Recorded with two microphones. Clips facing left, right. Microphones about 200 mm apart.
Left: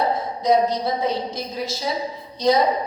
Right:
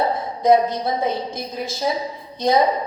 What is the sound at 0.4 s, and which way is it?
Speech, 55° right (ahead or behind).